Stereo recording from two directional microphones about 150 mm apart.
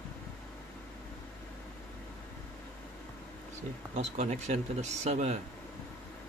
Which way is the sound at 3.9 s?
50° right (ahead or behind).